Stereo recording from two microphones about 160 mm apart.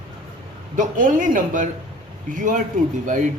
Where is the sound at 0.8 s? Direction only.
55° right (ahead or behind).